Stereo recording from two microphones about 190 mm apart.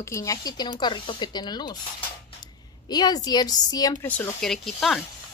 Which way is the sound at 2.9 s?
20° left (ahead or behind).